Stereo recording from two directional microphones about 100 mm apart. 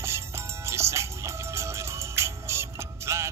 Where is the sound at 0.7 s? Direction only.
25° right (ahead or behind).